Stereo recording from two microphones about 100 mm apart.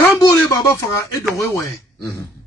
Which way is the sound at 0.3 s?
40° left (ahead or behind).